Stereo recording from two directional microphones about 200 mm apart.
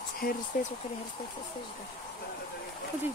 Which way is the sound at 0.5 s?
45° left (ahead or behind).